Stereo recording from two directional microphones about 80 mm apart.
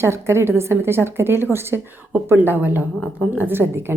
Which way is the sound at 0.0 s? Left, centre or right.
Right.